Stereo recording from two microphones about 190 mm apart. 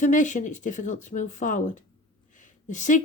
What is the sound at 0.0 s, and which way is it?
Speech, 40° left (ahead or behind).